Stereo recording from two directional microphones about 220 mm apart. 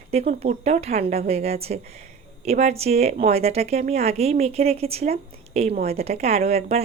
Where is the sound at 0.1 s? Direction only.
30° right (ahead or behind).